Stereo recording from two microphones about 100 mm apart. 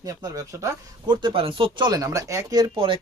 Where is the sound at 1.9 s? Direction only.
35° right (ahead or behind).